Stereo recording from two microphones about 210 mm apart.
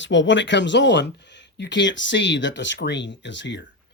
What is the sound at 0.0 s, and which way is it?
Speech, 60° left (ahead or behind).